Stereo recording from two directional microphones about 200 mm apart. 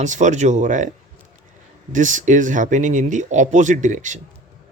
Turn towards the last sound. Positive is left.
turn(degrees=-40)  # may be behind; listen again after turning